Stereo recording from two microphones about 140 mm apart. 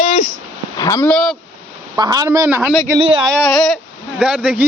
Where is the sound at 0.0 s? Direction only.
55° left (ahead or behind).